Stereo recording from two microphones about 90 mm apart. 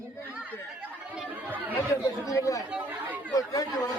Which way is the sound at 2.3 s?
40° left (ahead or behind).